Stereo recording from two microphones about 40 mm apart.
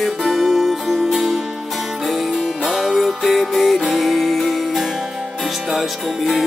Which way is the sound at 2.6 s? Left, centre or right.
Centre.